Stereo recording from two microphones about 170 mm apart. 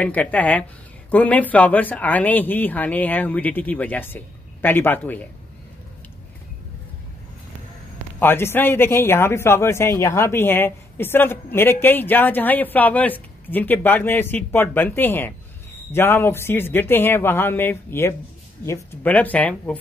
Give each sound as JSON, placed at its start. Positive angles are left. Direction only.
{"t": 0.0, "sound": "speech", "side_deg": 10}
{"t": 8.2, "sound": "speech", "side_deg": 15}